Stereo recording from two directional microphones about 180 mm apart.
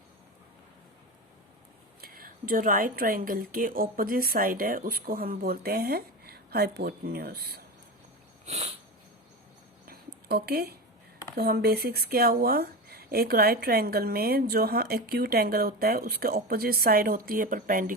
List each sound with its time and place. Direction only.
2.0 s speech: 55° right (ahead or behind)
8.4 s sniff: 35° right (ahead or behind)
9.8 s a sound: 55° right (ahead or behind)
11.3 s speech: 60° right (ahead or behind)